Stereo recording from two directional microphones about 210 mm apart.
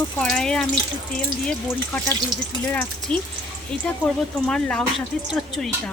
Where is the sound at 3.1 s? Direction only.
25° right (ahead or behind).